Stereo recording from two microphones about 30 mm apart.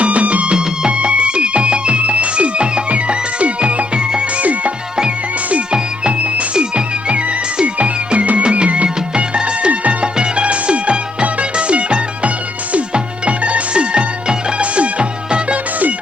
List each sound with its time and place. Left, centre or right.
0.0 s music: right
0.5 s music: right
0.9 s music: right
4.4 s music: right
6.1 s music: right
6.5 s music: right
10.4 s music: right
14.6 s music: right